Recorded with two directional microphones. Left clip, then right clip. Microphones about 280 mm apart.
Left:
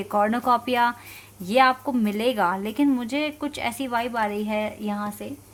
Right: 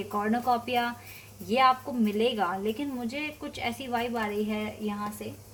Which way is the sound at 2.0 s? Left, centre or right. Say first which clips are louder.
Left 4 dB; left.